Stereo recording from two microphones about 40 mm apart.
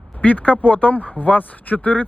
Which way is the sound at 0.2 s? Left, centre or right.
Left.